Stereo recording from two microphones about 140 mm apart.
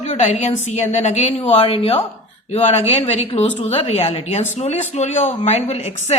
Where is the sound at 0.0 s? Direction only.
55° left (ahead or behind).